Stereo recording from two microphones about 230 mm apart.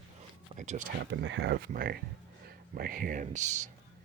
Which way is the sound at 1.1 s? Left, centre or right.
Right.